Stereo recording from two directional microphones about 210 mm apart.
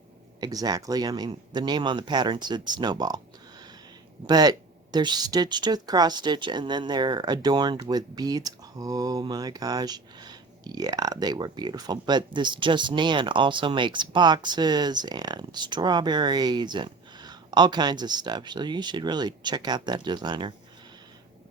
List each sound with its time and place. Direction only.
0.3 s speech: 20° right (ahead or behind)
4.3 s speech: 20° right (ahead or behind)